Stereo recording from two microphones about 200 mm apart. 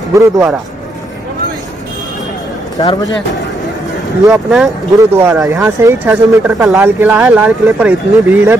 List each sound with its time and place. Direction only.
0.1 s speech: 15° right (ahead or behind)
4.3 s speech: centre (ahead or behind)